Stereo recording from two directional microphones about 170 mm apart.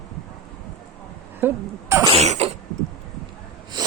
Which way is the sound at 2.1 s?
40° right (ahead or behind).